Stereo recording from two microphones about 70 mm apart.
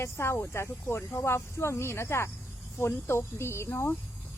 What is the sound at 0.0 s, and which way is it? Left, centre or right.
Speech, left.